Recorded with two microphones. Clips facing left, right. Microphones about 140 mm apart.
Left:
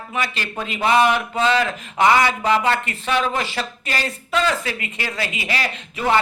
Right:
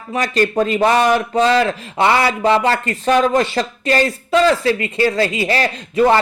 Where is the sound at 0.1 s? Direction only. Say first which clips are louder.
Right 10 dB; 45° right (ahead or behind).